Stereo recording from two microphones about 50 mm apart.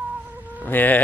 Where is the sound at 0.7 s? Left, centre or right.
Left.